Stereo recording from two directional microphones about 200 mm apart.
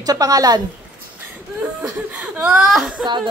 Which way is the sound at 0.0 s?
20° right (ahead or behind).